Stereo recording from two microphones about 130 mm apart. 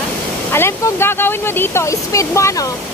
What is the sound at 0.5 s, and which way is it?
Speech, 20° left (ahead or behind).